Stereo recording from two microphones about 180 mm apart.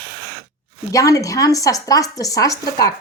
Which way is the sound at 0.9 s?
20° left (ahead or behind).